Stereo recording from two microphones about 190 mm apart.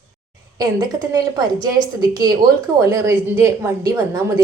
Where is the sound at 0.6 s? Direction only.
20° right (ahead or behind).